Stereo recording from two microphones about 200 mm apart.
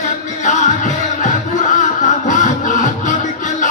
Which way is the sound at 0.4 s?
35° left (ahead or behind).